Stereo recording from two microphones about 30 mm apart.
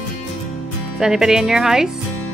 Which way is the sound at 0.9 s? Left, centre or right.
Centre.